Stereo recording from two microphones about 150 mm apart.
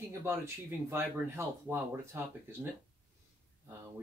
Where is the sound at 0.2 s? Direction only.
15° right (ahead or behind).